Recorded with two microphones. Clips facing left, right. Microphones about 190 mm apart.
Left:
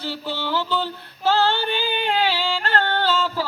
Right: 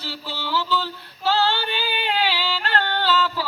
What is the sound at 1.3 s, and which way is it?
Yodeling, 50° left (ahead or behind).